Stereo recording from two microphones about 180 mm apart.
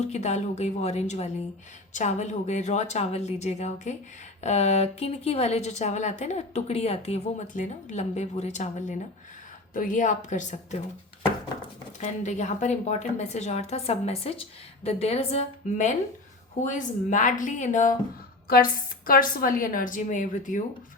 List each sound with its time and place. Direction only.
0.0 s a woman's voice: 40° left (ahead or behind)
11.9 s a woman's voice: 40° left (ahead or behind)
18.4 s a woman's voice: 55° left (ahead or behind)